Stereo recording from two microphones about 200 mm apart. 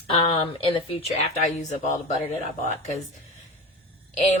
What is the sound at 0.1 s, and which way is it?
Speech, 25° left (ahead or behind).